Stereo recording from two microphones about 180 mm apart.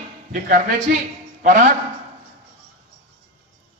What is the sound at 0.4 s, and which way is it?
A man's voice, 55° right (ahead or behind).